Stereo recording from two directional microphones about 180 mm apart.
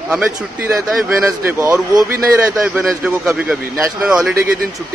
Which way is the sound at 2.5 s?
5° right (ahead or behind).